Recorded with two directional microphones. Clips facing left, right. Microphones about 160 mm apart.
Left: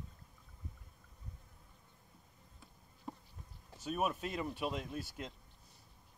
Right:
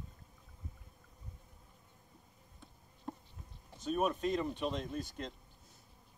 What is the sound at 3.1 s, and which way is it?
Insect, centre (ahead or behind).